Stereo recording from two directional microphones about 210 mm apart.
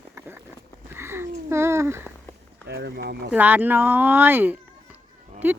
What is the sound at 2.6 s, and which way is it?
Speech, 55° right (ahead or behind).